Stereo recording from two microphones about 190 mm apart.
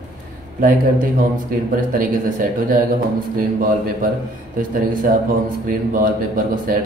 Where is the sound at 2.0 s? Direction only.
45° right (ahead or behind).